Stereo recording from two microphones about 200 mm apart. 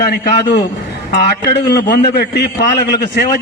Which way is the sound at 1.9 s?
55° left (ahead or behind).